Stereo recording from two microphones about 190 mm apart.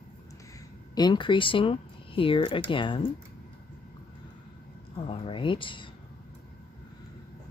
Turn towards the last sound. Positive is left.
turn(degrees=25)  # may be behind; listen again after turning